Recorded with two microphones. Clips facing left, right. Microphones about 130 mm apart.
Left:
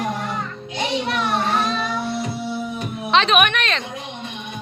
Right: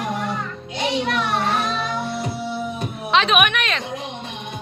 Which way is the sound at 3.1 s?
5° right (ahead or behind).